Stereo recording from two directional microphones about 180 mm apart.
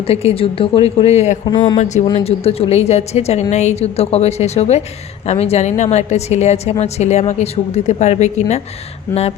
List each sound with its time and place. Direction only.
0.1 s a woman's voice: 35° left (ahead or behind)
1.5 s speech: 25° left (ahead or behind)
1.8 s a woman's voice: 40° left (ahead or behind)